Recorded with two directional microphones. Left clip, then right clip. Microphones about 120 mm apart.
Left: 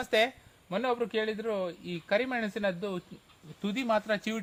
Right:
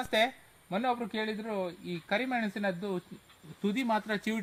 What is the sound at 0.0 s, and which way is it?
Speech, 25° left (ahead or behind).